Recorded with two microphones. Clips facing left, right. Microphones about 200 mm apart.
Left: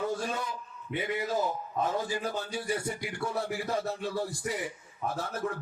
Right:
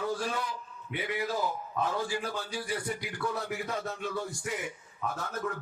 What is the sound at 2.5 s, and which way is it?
A man's voice, 25° left (ahead or behind).